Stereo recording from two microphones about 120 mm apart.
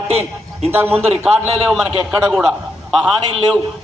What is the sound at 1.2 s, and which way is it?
A man's voice, 5° right (ahead or behind).